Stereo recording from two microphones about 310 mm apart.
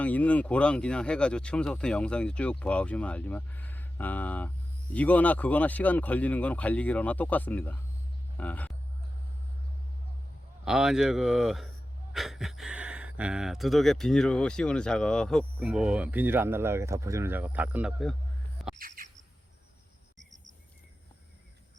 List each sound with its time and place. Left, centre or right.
0.0 s speech: centre
10.7 s speech: centre
18.8 s bird: right